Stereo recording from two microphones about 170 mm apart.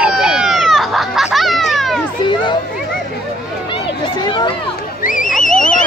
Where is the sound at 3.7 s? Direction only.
25° left (ahead or behind).